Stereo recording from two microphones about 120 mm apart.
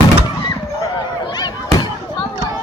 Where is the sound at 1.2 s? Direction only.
35° left (ahead or behind).